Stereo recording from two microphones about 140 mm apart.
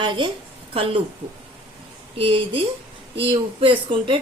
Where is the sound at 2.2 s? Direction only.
40° right (ahead or behind).